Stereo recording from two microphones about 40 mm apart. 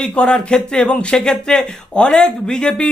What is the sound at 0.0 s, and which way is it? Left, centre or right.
Speech, left.